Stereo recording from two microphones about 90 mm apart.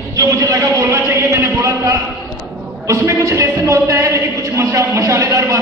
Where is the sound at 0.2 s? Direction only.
35° right (ahead or behind).